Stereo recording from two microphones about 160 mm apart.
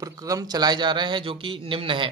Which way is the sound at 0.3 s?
25° right (ahead or behind).